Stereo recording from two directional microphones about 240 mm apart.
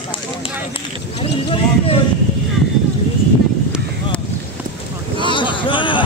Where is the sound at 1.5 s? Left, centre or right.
Left.